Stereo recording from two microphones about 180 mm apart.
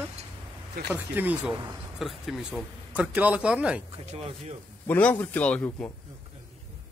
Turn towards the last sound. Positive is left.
turn(degrees=10)  # may be behind; listen again after turning